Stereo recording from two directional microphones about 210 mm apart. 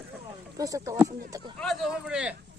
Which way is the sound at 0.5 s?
15° right (ahead or behind).